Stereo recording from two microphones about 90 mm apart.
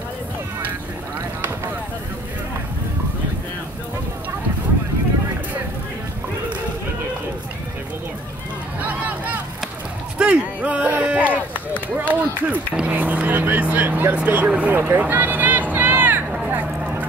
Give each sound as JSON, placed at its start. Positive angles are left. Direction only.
{"t": 8.8, "sound": "vehicle", "side_deg": -15}
{"t": 10.1, "sound": "a sound", "side_deg": -10}
{"t": 12.1, "sound": "vehicle", "side_deg": -15}